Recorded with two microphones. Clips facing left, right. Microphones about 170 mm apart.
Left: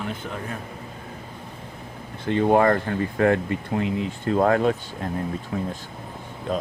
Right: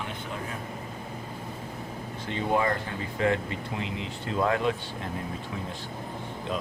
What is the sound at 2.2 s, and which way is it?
Speech, 55° left (ahead or behind).